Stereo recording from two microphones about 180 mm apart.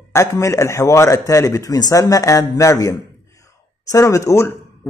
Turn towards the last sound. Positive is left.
turn(degrees=15)  # may be behind; listen again after turning